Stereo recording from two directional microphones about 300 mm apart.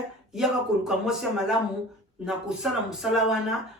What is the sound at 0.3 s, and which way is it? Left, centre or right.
Speech, centre.